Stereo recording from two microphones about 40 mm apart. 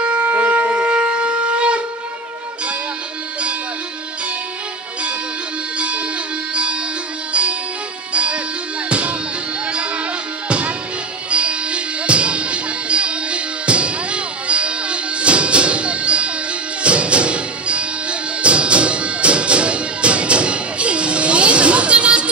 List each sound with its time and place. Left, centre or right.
0.0 s shofar: right
5.8 s music: right
11.2 s music: right